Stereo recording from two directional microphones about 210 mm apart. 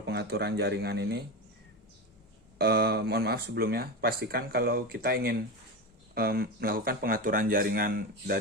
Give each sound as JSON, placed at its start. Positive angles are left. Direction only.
{"t": 0.0, "sound": "speech", "side_deg": -50}
{"t": 2.6, "sound": "speech", "side_deg": -50}